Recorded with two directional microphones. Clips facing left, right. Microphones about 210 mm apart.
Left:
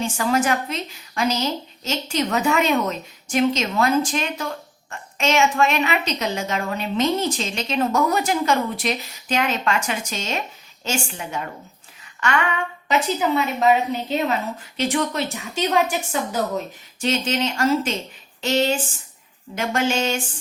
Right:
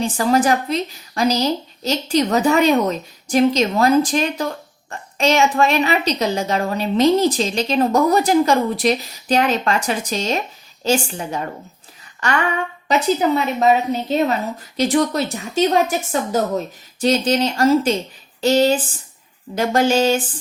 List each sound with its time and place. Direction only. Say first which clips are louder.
0.0 s a woman's voice: right 4 dB; 35° right (ahead or behind)
17.0 s a woman's voice: right 5 dB; 35° right (ahead or behind)